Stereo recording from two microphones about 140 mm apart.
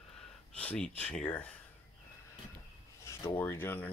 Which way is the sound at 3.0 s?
20° left (ahead or behind).